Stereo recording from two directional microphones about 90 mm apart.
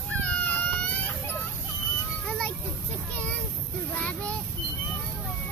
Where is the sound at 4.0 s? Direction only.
15° left (ahead or behind).